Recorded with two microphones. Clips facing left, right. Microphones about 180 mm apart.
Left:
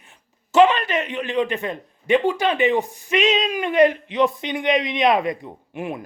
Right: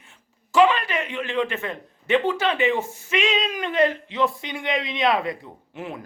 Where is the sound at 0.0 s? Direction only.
20° left (ahead or behind).